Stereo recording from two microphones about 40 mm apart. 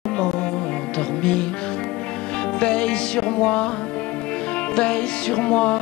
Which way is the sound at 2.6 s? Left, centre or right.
Left.